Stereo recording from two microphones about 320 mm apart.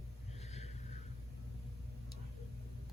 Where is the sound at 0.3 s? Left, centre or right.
Left.